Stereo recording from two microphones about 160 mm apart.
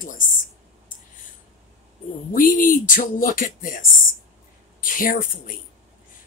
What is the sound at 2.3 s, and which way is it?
Speech, 60° left (ahead or behind).